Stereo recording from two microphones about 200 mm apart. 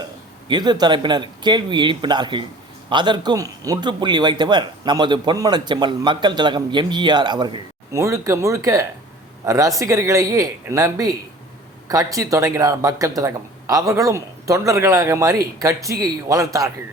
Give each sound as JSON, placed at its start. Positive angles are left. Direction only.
{"t": 0.0, "sound": "speech", "side_deg": -20}